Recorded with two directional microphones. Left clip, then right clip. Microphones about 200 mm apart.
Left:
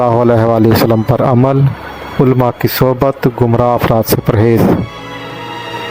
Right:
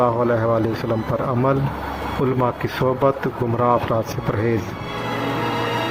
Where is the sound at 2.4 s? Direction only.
55° left (ahead or behind).